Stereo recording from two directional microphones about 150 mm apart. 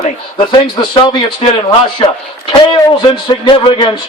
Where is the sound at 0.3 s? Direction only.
35° left (ahead or behind).